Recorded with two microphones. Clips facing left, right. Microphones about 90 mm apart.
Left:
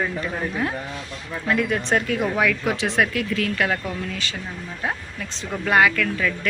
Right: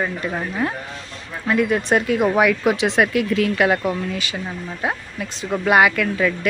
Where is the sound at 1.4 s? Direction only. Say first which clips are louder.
Right 4 dB; 10° right (ahead or behind).